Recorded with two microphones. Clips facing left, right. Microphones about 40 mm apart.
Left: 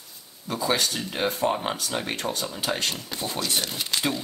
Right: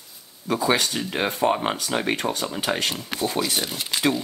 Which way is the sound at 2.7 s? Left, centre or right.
Right.